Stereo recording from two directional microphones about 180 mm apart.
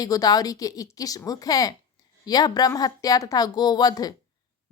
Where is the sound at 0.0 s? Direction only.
20° left (ahead or behind).